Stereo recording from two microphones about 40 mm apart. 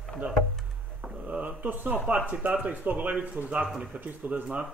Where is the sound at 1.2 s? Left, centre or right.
Right.